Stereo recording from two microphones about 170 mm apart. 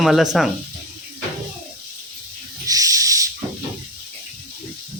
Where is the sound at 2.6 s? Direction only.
20° right (ahead or behind).